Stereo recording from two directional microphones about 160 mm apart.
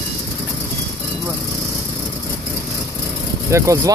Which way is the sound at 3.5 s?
20° right (ahead or behind).